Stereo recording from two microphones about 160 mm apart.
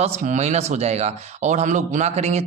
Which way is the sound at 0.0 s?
45° right (ahead or behind).